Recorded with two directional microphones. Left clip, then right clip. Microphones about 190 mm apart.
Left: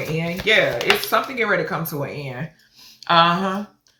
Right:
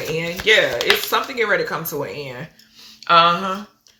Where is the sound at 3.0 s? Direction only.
Centre (ahead or behind).